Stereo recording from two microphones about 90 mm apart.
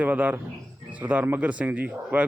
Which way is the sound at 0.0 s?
15° right (ahead or behind).